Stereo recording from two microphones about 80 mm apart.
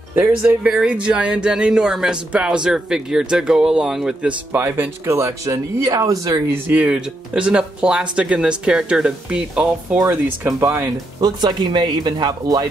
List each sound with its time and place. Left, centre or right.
0.1 s speech: centre
4.5 s speech: right
5.9 s speech: right
6.5 s speech: centre
11.1 s speech: right